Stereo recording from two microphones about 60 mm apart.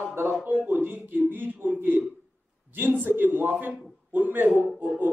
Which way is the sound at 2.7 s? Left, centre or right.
Right.